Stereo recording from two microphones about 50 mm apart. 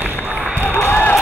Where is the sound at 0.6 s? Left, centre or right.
Left.